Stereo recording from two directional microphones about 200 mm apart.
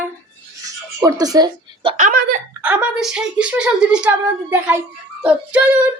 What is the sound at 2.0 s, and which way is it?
Giggle, 40° right (ahead or behind).